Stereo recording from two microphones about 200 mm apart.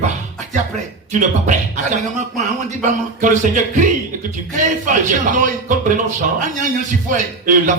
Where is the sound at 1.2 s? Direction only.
40° right (ahead or behind).